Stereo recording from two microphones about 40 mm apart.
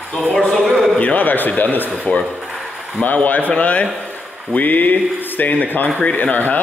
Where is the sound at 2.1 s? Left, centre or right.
Left.